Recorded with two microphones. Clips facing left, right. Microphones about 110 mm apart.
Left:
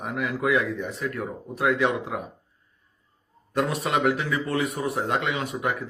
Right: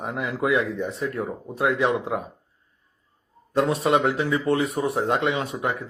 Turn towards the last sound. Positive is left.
turn(degrees=-25)  # may be behind; listen again after turning